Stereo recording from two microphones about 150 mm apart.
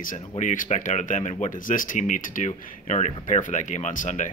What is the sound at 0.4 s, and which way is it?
Speech, 60° left (ahead or behind).